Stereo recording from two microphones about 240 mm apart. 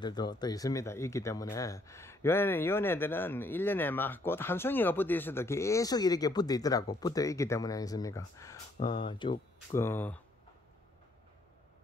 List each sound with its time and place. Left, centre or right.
0.0 s speech: centre